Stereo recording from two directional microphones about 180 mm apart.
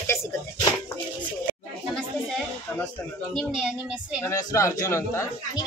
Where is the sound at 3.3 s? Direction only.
5° right (ahead or behind).